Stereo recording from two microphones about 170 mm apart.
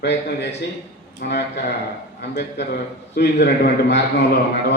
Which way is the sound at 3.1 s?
75° left (ahead or behind).